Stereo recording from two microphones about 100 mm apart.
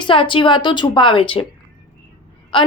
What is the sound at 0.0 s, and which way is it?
A woman's voice, 55° left (ahead or behind).